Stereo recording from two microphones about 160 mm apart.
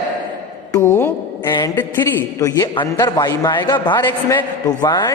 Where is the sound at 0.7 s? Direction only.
15° left (ahead or behind).